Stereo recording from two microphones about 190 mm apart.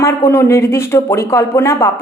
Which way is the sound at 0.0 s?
15° left (ahead or behind).